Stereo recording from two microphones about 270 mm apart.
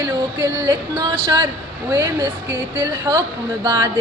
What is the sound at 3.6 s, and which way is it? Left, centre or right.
Music, centre.